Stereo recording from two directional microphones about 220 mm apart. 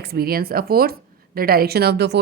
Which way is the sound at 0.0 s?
45° right (ahead or behind).